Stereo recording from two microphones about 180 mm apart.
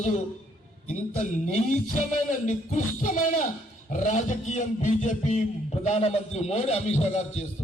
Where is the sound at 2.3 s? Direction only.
45° left (ahead or behind).